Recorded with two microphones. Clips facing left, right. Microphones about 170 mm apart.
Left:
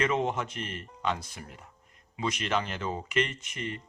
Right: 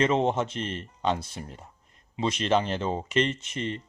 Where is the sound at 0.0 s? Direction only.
25° right (ahead or behind).